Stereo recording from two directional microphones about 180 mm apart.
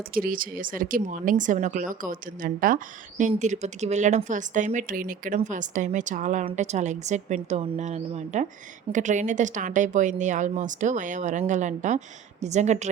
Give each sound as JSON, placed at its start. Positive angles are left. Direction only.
{"t": 0.1, "sound": "speech", "side_deg": -50}